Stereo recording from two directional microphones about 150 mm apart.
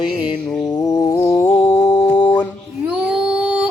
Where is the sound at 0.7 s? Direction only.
25° left (ahead or behind).